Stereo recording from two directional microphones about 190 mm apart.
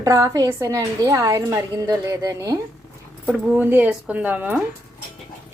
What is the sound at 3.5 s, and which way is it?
A woman's voice, 10° right (ahead or behind).